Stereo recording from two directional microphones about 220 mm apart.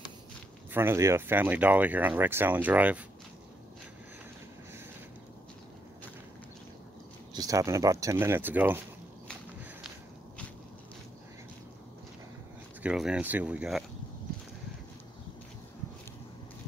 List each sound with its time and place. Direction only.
0.7 s speech: 10° right (ahead or behind)
7.3 s speech: 15° right (ahead or behind)
12.8 s speech: 5° right (ahead or behind)